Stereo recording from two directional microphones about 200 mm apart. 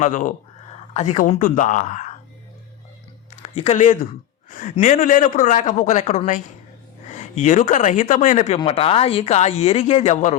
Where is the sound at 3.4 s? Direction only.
30° left (ahead or behind).